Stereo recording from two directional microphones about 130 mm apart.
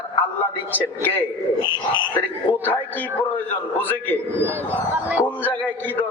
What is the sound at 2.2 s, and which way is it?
Speech, 15° left (ahead or behind).